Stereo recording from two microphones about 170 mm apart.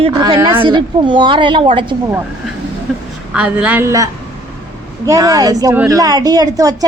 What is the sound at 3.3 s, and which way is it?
A woman's voice, 5° right (ahead or behind).